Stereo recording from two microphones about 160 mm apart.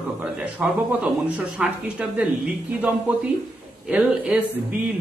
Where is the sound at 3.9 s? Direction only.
10° right (ahead or behind).